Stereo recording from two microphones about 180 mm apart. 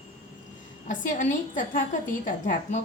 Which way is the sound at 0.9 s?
45° left (ahead or behind).